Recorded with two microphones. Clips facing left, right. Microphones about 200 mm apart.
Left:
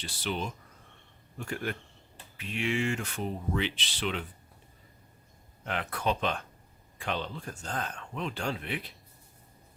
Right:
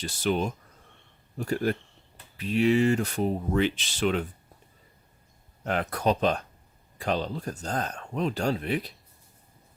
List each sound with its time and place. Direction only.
0.0 s speech: 45° right (ahead or behind)
5.6 s speech: 40° right (ahead or behind)